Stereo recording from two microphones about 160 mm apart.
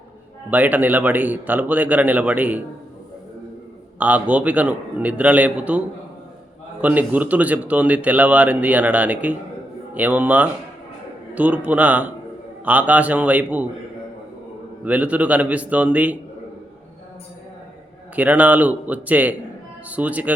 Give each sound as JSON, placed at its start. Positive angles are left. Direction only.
{"t": 0.5, "sound": "speech", "side_deg": -10}
{"t": 4.0, "sound": "speech", "side_deg": -10}
{"t": 6.8, "sound": "speech", "side_deg": -10}
{"t": 14.8, "sound": "speech", "side_deg": -10}
{"t": 18.2, "sound": "speech", "side_deg": -10}